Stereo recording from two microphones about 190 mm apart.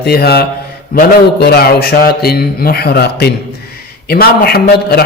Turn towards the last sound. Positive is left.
turn(degrees=55)  # may be behind; listen again after turning